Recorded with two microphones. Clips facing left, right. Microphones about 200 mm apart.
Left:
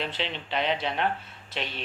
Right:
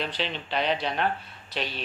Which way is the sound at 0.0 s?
25° left (ahead or behind).